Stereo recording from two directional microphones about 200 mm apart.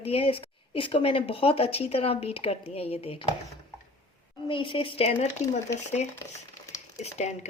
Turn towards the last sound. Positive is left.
turn(degrees=35)  # may be behind; listen again after turning